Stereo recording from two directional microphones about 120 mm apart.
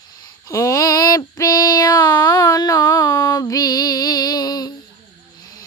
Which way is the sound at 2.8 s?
20° left (ahead or behind).